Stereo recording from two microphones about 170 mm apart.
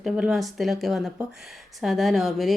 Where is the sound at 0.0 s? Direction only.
Centre (ahead or behind).